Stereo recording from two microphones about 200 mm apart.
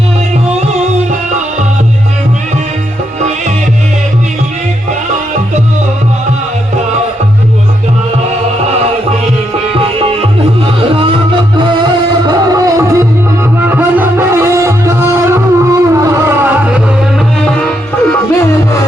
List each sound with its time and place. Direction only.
12.2 s music: 20° right (ahead or behind)